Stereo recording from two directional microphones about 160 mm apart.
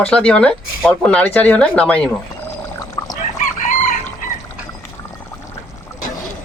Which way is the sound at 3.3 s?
55° left (ahead or behind).